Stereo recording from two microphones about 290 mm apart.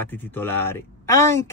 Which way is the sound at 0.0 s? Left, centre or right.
Centre.